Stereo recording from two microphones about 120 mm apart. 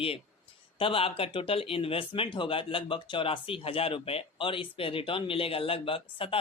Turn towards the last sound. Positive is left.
turn(degrees=50)  # may be behind; listen again after turning